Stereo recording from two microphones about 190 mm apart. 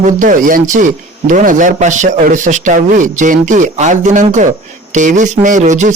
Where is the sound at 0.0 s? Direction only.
45° right (ahead or behind).